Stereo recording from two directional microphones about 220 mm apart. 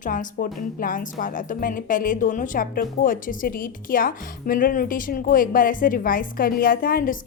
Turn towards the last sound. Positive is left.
turn(degrees=40)  # may be behind; listen again after turning